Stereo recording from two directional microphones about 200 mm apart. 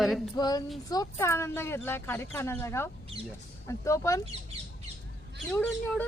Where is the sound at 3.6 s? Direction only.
15° left (ahead or behind).